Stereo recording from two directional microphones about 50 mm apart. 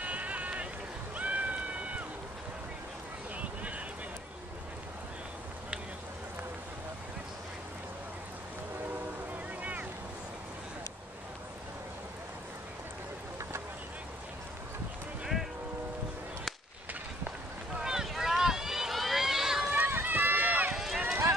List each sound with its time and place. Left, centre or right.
0.0 s sheep: right
1.1 s a sound: right
3.3 s a sound: right
9.6 s boat: right
17.8 s run: centre
19.7 s run: right
20.7 s run: centre